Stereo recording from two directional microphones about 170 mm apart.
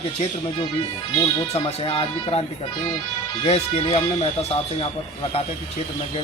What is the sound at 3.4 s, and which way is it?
Speech, 40° left (ahead or behind).